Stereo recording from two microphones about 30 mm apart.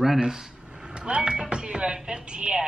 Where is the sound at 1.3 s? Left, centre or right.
Right.